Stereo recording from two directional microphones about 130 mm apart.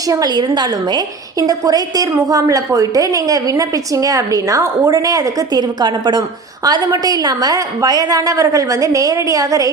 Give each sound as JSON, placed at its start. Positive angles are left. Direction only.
{"t": 0.1, "sound": "a woman's voice", "side_deg": -30}